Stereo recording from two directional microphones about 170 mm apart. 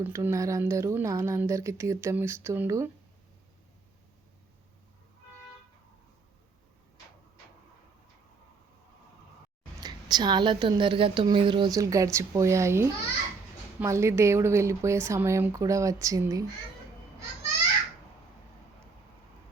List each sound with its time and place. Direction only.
0.0 s a woman's voice: 15° right (ahead or behind)
9.8 s a woman's voice: 25° right (ahead or behind)